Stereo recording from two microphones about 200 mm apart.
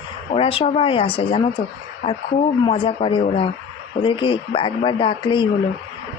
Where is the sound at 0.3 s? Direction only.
30° left (ahead or behind).